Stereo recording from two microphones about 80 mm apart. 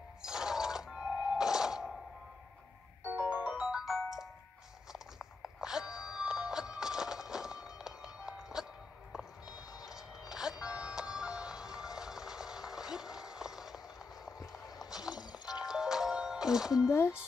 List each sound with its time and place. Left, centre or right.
0.2 s music: centre
3.1 s music: centre
4.9 s a sound: centre
10.6 s music: centre
14.2 s a sound: centre
15.1 s music: left
15.6 s music: centre